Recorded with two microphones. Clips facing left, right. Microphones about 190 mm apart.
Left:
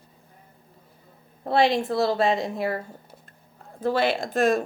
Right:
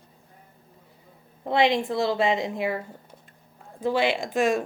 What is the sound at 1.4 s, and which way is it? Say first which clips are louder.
Speech: left 1 dB; 15° right (ahead or behind).